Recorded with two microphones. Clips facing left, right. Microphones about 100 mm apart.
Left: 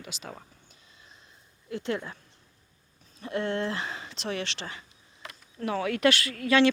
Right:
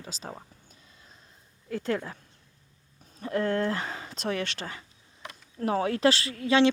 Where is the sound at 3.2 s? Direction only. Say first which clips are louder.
Right 3 dB; 40° right (ahead or behind); by 6.6 s 25° right (ahead or behind).